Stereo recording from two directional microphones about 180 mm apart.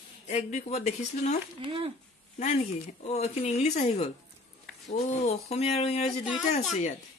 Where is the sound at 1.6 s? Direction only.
30° right (ahead or behind).